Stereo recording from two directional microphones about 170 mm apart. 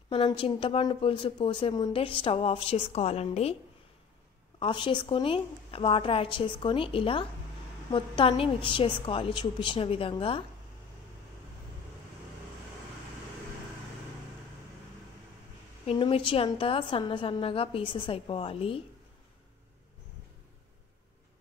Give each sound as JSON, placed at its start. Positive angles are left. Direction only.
{"t": 0.1, "sound": "a woman's voice", "side_deg": 30}
{"t": 4.6, "sound": "a woman's voice", "side_deg": 30}
{"t": 15.9, "sound": "a woman's voice", "side_deg": 30}